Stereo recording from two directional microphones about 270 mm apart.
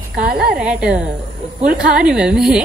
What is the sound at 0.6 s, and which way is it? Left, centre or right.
A woman's voice, centre.